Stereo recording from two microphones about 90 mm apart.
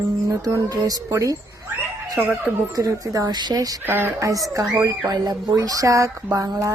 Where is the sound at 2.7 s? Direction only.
40° right (ahead or behind).